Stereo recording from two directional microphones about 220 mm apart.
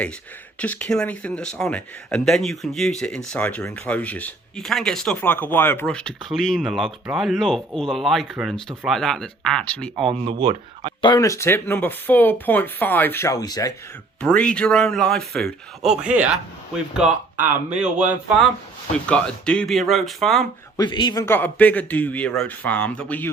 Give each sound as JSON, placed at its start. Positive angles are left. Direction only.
{"t": 0.6, "sound": "speech", "side_deg": 5}
{"t": 10.1, "sound": "speech", "side_deg": -25}
{"t": 11.0, "sound": "speech", "side_deg": 15}
{"t": 14.2, "sound": "speech", "side_deg": 5}
{"t": 20.7, "sound": "speech", "side_deg": 20}